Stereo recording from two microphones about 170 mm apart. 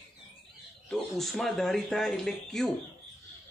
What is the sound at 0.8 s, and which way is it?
Speech, centre (ahead or behind).